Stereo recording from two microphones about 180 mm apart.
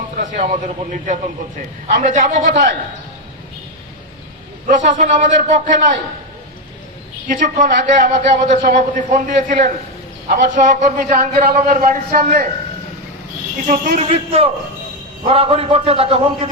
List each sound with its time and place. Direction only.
0.2 s a man's voice: 40° right (ahead or behind)
4.6 s a man's voice: 45° right (ahead or behind)
7.3 s a man's voice: 45° right (ahead or behind)
13.7 s a man's voice: 45° right (ahead or behind)
14.1 s a man's voice: 35° right (ahead or behind)